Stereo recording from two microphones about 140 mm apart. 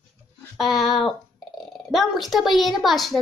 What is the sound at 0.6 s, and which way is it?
A woman's voice, centre (ahead or behind).